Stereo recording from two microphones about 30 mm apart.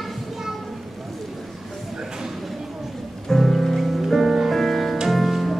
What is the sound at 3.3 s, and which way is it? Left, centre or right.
Music, centre.